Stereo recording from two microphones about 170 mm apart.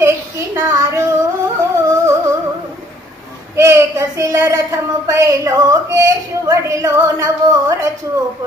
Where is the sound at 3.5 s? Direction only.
15° right (ahead or behind).